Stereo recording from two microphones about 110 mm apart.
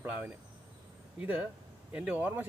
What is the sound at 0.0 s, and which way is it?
Speech, 15° right (ahead or behind).